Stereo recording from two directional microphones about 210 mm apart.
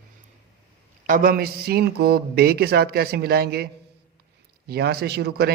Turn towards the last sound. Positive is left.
turn(degrees=-50)  # may be behind; listen again after turning